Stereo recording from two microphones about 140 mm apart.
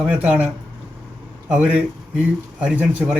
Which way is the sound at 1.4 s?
10° right (ahead or behind).